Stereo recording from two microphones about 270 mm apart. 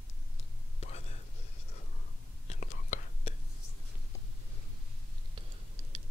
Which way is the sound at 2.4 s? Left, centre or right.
Left.